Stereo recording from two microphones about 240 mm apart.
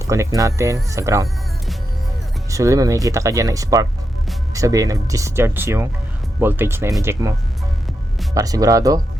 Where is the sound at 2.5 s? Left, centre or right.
Centre.